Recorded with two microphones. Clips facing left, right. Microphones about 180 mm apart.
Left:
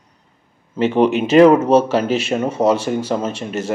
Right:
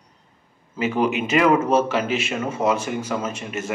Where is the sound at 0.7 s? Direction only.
30° left (ahead or behind).